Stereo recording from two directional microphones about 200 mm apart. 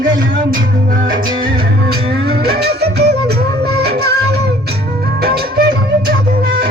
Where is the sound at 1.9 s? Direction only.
50° right (ahead or behind).